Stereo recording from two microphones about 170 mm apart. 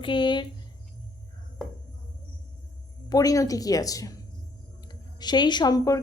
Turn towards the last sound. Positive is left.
turn(degrees=20)  # may be behind; listen again after turning